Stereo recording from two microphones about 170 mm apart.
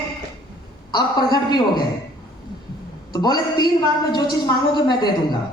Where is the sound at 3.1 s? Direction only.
25° left (ahead or behind).